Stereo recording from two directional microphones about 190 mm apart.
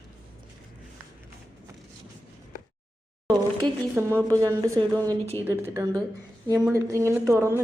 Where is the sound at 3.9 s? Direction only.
10° right (ahead or behind).